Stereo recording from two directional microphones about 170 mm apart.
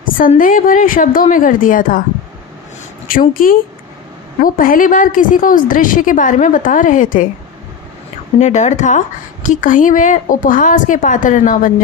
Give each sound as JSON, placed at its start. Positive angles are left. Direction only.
{"t": 0.4, "sound": "a woman's voice", "side_deg": 55}
{"t": 3.1, "sound": "a woman's voice", "side_deg": 55}
{"t": 8.4, "sound": "a woman's voice", "side_deg": 45}